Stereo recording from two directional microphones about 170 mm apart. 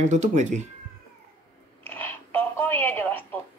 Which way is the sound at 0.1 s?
45° right (ahead or behind).